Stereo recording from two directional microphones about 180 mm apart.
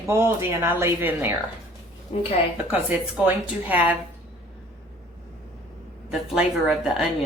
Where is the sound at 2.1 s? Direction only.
30° left (ahead or behind).